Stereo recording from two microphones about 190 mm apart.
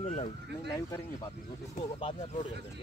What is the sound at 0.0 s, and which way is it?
Speech, 35° left (ahead or behind).